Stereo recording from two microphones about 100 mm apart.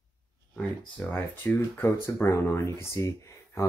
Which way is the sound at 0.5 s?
10° left (ahead or behind).